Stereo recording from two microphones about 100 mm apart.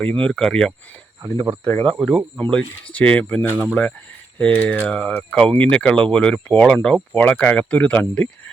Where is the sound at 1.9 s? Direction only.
5° left (ahead or behind).